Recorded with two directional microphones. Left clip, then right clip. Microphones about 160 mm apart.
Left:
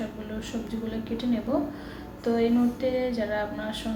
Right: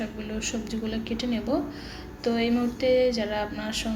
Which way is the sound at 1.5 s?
20° right (ahead or behind).